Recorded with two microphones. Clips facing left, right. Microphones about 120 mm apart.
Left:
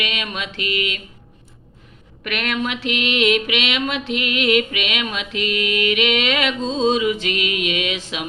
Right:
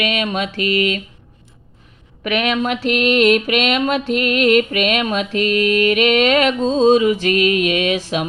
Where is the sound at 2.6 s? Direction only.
40° right (ahead or behind).